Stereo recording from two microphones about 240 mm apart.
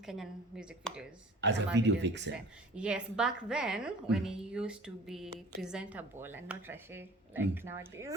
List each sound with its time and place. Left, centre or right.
0.0 s a woman's voice: centre
1.4 s speech: right
2.7 s a woman's voice: centre